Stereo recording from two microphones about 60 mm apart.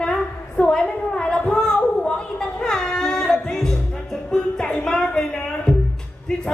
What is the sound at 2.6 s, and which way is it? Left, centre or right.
Music, centre.